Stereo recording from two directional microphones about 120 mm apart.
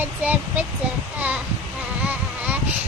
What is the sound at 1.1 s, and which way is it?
Child singing, 10° right (ahead or behind).